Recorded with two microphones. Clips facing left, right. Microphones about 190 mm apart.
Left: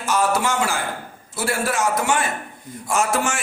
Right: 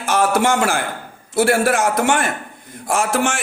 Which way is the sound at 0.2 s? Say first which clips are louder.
Right 5 dB; 60° right (ahead or behind).